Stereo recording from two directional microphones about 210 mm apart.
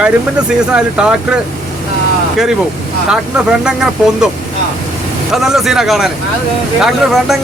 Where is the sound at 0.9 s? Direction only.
5° right (ahead or behind).